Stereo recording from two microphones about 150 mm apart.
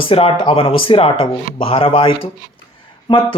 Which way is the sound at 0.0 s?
35° left (ahead or behind).